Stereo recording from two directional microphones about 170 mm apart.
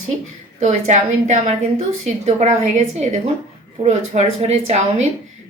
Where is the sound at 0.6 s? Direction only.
45° right (ahead or behind).